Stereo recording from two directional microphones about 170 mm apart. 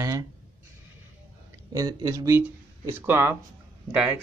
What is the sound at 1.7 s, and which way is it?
Speech, 20° right (ahead or behind).